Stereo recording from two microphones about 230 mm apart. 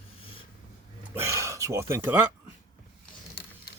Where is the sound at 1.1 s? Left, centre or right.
Centre.